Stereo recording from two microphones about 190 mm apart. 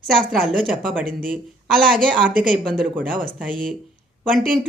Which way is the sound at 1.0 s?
50° right (ahead or behind).